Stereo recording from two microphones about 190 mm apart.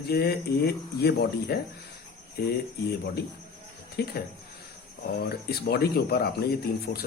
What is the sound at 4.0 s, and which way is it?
Speech, 55° left (ahead or behind).